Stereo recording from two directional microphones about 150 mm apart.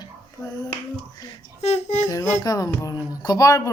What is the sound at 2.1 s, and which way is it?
Speech, 20° left (ahead or behind).